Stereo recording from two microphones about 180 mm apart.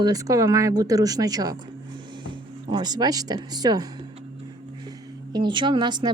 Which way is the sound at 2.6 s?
25° right (ahead or behind).